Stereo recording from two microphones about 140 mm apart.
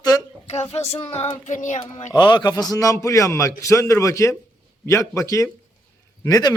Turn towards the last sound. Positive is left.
turn(degrees=25)  # may be behind; listen again after turning